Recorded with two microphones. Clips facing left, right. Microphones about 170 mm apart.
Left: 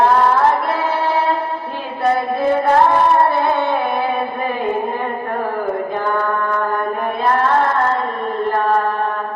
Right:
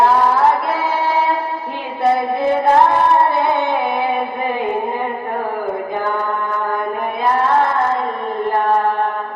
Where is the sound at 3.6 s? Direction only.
15° right (ahead or behind).